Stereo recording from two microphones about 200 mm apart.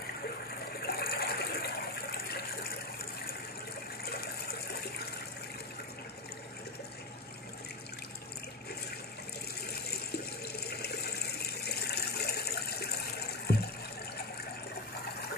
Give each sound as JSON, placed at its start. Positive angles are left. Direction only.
{"t": 0.8, "sound": "a sound", "side_deg": 50}
{"t": 4.0, "sound": "water", "side_deg": 50}
{"t": 9.7, "sound": "water", "side_deg": 55}